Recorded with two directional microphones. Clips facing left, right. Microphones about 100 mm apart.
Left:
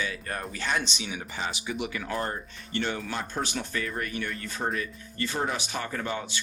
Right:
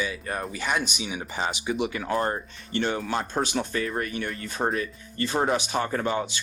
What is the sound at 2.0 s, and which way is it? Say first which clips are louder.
Speech: right 5 dB; 45° right (ahead or behind).